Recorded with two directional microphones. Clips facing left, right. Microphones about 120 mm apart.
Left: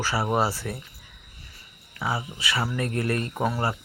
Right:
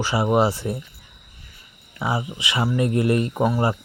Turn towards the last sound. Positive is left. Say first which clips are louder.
# right 5 dB
turn(degrees=-15)  # may be behind; listen again after turning